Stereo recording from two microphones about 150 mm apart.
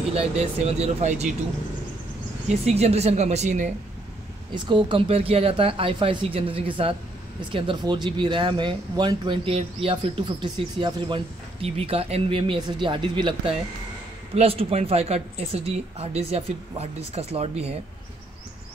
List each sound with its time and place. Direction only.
0.1 s speech: 45° right (ahead or behind)
2.4 s speech: 45° right (ahead or behind)
4.6 s speech: 30° right (ahead or behind)